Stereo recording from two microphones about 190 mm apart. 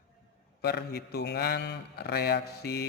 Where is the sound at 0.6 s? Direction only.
60° left (ahead or behind).